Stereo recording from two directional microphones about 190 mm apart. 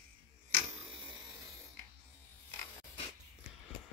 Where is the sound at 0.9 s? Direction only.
25° right (ahead or behind).